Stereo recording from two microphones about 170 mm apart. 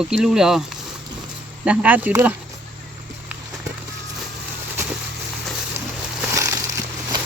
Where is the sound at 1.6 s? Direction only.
5° right (ahead or behind).